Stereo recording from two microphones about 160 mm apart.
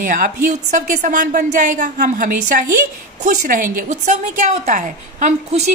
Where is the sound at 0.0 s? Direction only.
55° right (ahead or behind).